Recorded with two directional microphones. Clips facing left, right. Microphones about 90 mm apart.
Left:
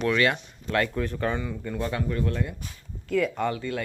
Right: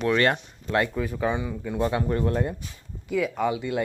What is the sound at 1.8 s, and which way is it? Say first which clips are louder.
Speech: right 4 dB; 30° right (ahead or behind).